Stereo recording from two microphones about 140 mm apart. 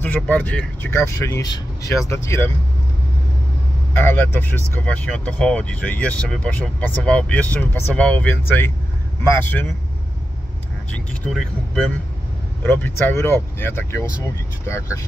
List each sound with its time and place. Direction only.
0.0 s speech: 10° left (ahead or behind)
3.9 s speech: 15° left (ahead or behind)
10.9 s speech: 5° left (ahead or behind); by 15.0 s 20° left (ahead or behind)